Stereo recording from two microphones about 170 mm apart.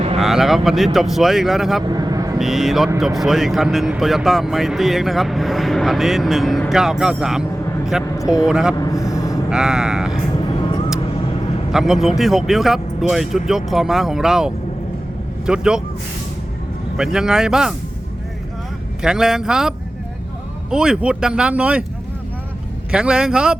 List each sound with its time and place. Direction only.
0.2 s a sound: centre (ahead or behind)
0.9 s speech: centre (ahead or behind)
1.8 s vehicle: 25° right (ahead or behind)
2.4 s speech: centre (ahead or behind)
8.2 s speech: 20° left (ahead or behind)
8.4 s speech: 5° right (ahead or behind)
8.7 s speech: 20° left (ahead or behind)
9.0 s a sound: 20° left (ahead or behind)
9.5 s speech: 5° right (ahead or behind)
11.7 s speech: centre (ahead or behind)
17.0 s speech: 5° right (ahead or behind)
19.0 s speech: 5° right (ahead or behind)
22.9 s speech: 5° right (ahead or behind)